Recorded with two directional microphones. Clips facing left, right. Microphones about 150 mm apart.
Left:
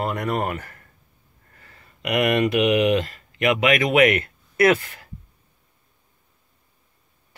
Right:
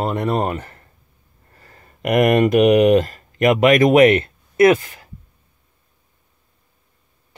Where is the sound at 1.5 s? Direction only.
40° right (ahead or behind); by 5.1 s 15° right (ahead or behind).